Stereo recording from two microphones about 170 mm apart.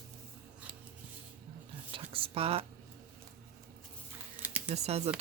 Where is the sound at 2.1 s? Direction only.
35° right (ahead or behind).